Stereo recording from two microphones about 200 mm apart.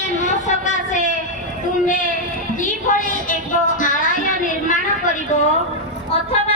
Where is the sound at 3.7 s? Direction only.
40° left (ahead or behind).